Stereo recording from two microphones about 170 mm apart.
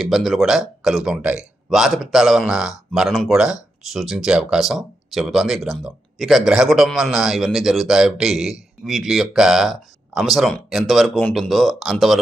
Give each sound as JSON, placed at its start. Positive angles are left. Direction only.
{"t": 0.0, "sound": "speech", "side_deg": 0}